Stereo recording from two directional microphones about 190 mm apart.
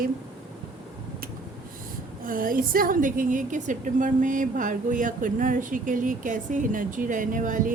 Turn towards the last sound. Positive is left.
turn(degrees=-45)  # may be behind; listen again after turning